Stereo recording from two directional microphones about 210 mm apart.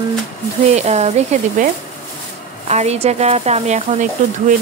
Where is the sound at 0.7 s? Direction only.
30° right (ahead or behind).